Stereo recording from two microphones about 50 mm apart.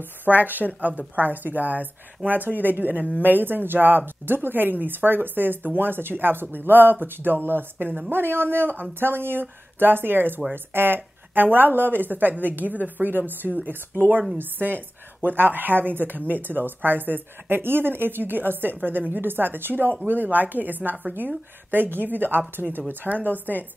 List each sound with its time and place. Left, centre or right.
0.2 s speech: right